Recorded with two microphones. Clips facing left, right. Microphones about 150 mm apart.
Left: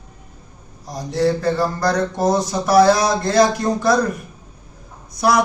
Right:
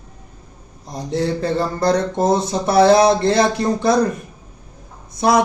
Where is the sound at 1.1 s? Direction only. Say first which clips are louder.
Left 2 dB; 25° right (ahead or behind).